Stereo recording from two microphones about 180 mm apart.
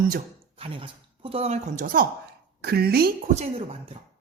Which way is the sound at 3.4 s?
35° right (ahead or behind).